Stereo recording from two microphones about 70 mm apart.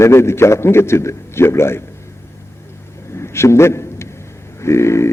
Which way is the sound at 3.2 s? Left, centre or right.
Left.